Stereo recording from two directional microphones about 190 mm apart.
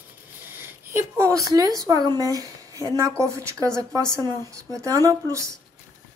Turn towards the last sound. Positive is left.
turn(degrees=-15)  # may be behind; listen again after turning